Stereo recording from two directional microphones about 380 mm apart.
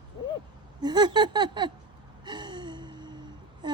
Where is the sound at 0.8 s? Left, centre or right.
Centre.